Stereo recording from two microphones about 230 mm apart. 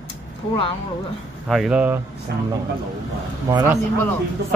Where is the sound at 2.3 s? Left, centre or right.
Right.